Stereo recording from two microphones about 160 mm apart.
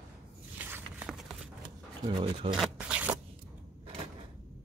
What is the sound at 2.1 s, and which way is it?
Speech, 30° right (ahead or behind).